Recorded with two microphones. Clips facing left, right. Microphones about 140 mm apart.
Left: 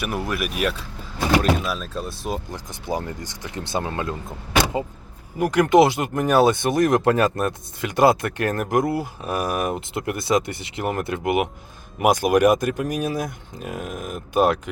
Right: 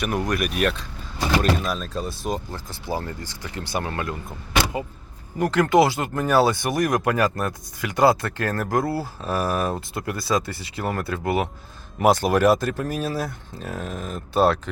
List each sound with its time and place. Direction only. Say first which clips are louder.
0.0 s speech: right 2 dB; 5° left (ahead or behind)
2.5 s speech: left 1 dB; 20° left (ahead or behind)
5.4 s speech: left 2 dB; 15° left (ahead or behind)